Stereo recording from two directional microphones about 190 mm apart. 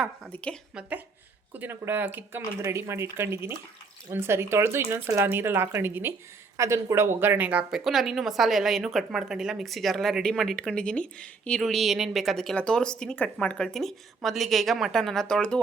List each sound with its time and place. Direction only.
0.0 s a woman's voice: 5° left (ahead or behind)
0.8 s a woman's voice: 10° right (ahead or behind)